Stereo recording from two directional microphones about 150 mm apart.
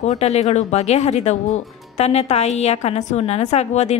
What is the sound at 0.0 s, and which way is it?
A woman's voice, 45° left (ahead or behind).